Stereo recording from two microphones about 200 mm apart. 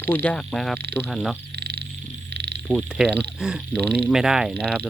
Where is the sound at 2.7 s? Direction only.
5° right (ahead or behind).